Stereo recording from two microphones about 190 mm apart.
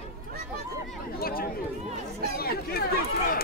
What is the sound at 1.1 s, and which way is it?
Chatter, 50° left (ahead or behind).